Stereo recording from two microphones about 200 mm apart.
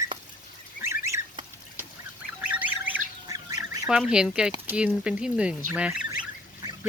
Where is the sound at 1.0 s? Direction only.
15° right (ahead or behind).